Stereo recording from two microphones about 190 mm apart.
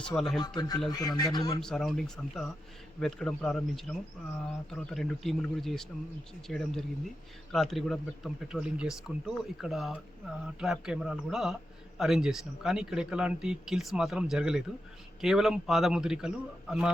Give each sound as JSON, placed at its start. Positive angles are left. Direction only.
{"t": 0.0, "sound": "speech", "side_deg": 5}
{"t": 0.4, "sound": "a man's voice", "side_deg": 20}
{"t": 1.6, "sound": "speech", "side_deg": 0}